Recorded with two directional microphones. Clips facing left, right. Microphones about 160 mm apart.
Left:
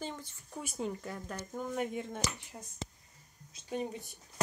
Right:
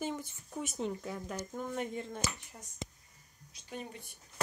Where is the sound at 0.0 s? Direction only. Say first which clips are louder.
Right 4 dB; 10° right (ahead or behind).